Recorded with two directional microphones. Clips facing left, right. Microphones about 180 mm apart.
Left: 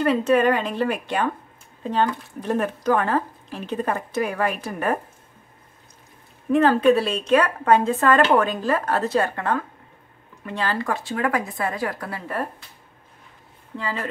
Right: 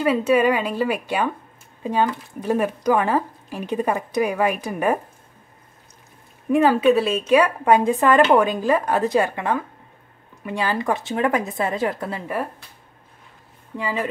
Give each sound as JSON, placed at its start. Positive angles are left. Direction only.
{"t": 0.0, "sound": "speech", "side_deg": -10}
{"t": 6.5, "sound": "a woman's voice", "side_deg": -10}
{"t": 13.7, "sound": "speech", "side_deg": -15}